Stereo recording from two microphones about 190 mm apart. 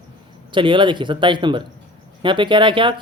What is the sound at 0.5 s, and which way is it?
Speech, 25° right (ahead or behind).